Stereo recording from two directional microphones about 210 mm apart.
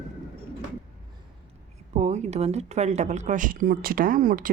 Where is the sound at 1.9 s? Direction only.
30° right (ahead or behind).